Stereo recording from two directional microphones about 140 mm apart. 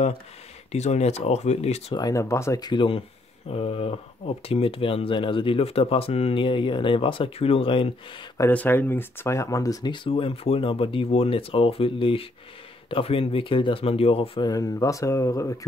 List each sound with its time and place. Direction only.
0.7 s speech: 55° left (ahead or behind)
2.0 s speech: 25° left (ahead or behind); by 7.9 s 40° left (ahead or behind)
8.4 s speech: 15° left (ahead or behind); by 14.5 s 40° left (ahead or behind)
14.5 s speech: 25° left (ahead or behind)